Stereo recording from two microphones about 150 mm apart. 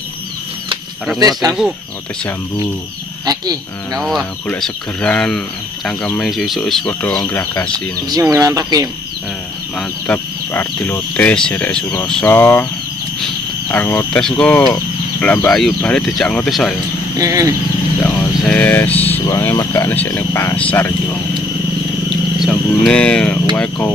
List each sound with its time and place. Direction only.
3.3 s speech: 25° right (ahead or behind)
4.0 s speech: centre (ahead or behind)
8.1 s speech: 25° right (ahead or behind)
9.8 s speech: 10° left (ahead or behind)
13.2 s a sound: 15° left (ahead or behind)
14.2 s speech: 5° left (ahead or behind)
17.2 s speech: 20° right (ahead or behind)
18.0 s vehicle: 5° left (ahead or behind)
19.4 s speech: 20° left (ahead or behind)
22.4 s speech: 5° left (ahead or behind)